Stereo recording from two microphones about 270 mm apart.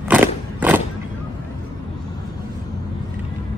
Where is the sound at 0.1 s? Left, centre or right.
Centre.